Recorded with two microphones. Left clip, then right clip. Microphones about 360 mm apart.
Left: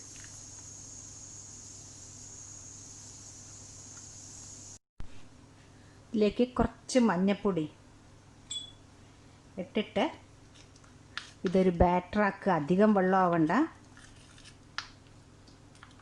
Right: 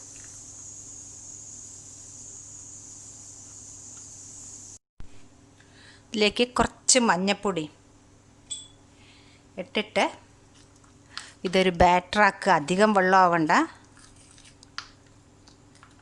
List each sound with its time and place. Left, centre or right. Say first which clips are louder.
6.3 s speech: right 6 dB; right
9.6 s speech: right 6 dB; right
11.4 s speech: right 6 dB; right